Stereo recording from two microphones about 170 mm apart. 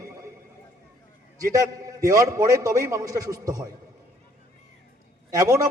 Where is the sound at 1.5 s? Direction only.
20° right (ahead or behind).